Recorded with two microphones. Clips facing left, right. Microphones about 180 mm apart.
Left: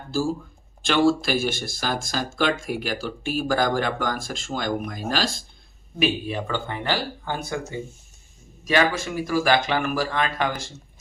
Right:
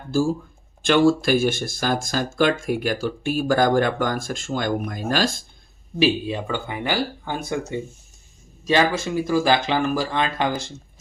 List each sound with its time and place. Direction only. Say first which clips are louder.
0.8 s speech: right 3 dB; 50° right (ahead or behind)
6.0 s speech: right 4 dB; 20° right (ahead or behind)
8.6 s speech: right 2 dB; 25° right (ahead or behind)